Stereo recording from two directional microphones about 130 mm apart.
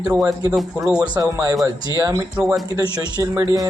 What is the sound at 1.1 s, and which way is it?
A man's voice, 25° right (ahead or behind).